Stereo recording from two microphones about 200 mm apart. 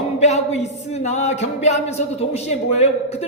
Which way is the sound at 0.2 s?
35° left (ahead or behind).